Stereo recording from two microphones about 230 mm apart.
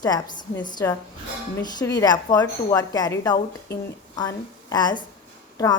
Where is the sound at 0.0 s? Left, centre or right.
Centre.